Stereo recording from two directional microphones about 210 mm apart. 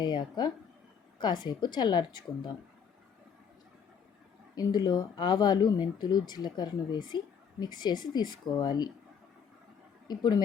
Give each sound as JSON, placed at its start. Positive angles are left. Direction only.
{"t": 0.0, "sound": "speech", "side_deg": 20}
{"t": 4.5, "sound": "speech", "side_deg": 20}
{"t": 10.1, "sound": "speech", "side_deg": 20}